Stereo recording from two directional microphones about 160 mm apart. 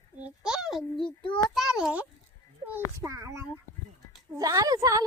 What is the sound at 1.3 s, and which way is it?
Speech, 30° left (ahead or behind).